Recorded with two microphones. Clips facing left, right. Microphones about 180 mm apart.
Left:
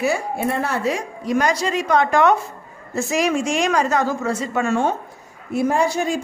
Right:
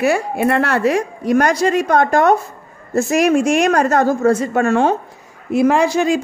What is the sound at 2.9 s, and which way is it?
A woman's voice, 55° right (ahead or behind).